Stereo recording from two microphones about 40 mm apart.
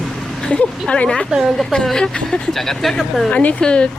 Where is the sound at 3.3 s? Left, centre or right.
Left.